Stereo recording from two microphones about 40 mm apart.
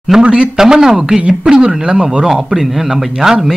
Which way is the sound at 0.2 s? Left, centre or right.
Right.